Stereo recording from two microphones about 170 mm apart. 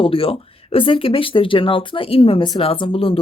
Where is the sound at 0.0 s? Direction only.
35° left (ahead or behind).